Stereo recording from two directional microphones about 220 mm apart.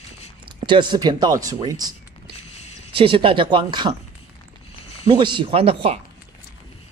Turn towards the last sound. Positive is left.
turn(degrees=-25)  # may be behind; listen again after turning